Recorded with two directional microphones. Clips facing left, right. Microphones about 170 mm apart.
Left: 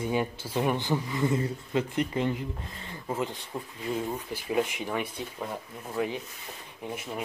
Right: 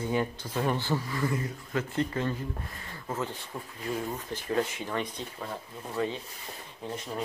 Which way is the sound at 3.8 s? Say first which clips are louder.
Left 2 dB; 10° left (ahead or behind).